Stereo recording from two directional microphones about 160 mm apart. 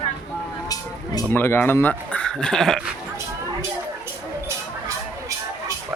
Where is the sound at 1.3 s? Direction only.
15° left (ahead or behind).